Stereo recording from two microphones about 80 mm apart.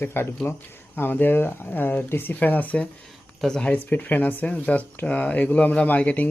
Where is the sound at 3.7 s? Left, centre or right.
Centre.